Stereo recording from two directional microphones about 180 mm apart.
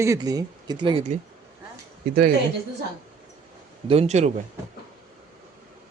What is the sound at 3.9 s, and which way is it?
Speech, 35° right (ahead or behind).